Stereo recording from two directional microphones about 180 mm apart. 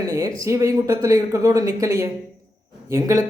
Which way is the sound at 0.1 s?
15° right (ahead or behind).